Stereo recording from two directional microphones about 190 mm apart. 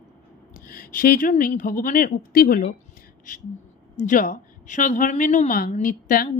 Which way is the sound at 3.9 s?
40° left (ahead or behind).